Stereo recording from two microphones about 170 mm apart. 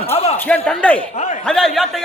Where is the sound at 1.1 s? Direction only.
45° left (ahead or behind).